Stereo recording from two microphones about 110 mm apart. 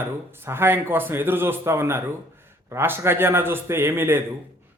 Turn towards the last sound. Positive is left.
turn(degrees=-20)  # may be behind; listen again after turning